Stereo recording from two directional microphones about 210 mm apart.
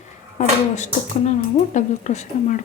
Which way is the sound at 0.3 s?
35° left (ahead or behind).